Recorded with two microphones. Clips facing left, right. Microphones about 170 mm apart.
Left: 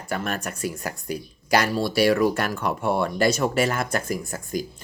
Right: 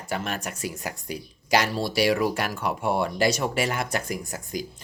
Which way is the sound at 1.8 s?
50° left (ahead or behind).